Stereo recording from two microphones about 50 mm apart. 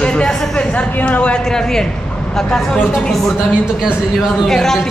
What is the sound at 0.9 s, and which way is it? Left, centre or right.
Speech, left.